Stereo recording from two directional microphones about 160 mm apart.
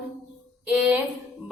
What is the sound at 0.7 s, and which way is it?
Speech, 10° right (ahead or behind).